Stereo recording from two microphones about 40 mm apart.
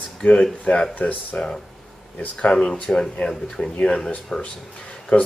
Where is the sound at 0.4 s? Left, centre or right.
Left.